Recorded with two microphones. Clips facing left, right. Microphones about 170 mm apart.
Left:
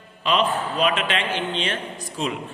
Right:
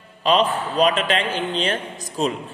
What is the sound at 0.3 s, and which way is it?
A man's voice, 35° right (ahead or behind).